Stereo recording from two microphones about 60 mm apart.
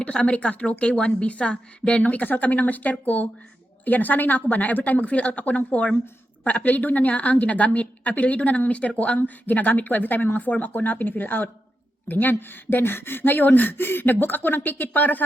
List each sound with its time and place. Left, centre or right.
0.0 s a woman's voice: centre